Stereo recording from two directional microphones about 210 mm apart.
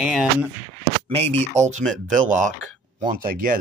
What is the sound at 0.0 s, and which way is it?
Speech, 5° right (ahead or behind).